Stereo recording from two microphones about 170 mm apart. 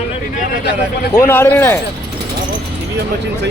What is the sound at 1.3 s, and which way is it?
Speech, 10° left (ahead or behind).